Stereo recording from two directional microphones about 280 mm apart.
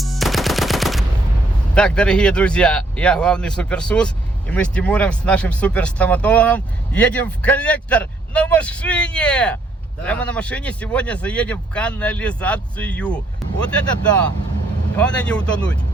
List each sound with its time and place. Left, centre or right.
0.0 s machine gun: centre
1.7 s speech: centre
13.4 s vehicle: centre
14.9 s speech: centre